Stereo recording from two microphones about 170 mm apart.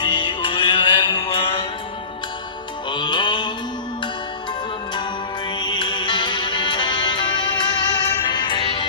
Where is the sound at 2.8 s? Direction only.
25° left (ahead or behind).